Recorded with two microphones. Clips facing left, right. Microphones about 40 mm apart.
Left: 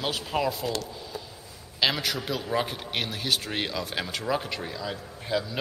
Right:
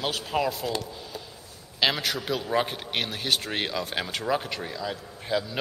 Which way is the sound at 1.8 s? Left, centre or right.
Centre.